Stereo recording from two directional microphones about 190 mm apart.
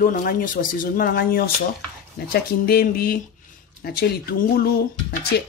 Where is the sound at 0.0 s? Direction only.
50° left (ahead or behind).